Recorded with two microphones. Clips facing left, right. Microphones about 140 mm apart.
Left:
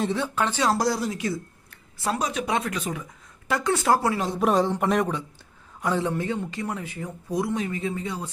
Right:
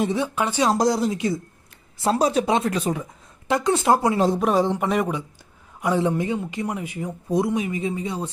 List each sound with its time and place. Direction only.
0.0 s speech: 15° right (ahead or behind); by 3.1 s 35° right (ahead or behind)
3.5 s speech: 20° right (ahead or behind)
4.4 s speech: centre (ahead or behind)
5.8 s speech: 15° right (ahead or behind)